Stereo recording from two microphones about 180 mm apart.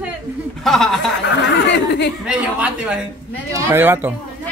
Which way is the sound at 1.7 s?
70° left (ahead or behind).